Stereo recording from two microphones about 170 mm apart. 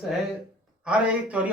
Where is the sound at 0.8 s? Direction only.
5° right (ahead or behind).